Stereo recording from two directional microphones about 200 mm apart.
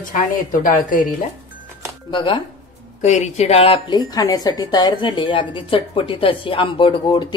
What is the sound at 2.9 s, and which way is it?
A woman's voice, 35° left (ahead or behind).